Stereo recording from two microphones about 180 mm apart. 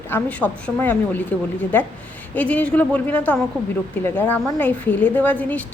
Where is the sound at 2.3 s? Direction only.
10° left (ahead or behind).